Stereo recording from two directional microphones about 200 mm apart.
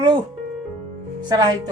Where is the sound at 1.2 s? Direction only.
20° right (ahead or behind).